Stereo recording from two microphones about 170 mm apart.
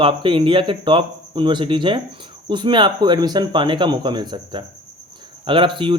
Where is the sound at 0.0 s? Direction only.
30° right (ahead or behind).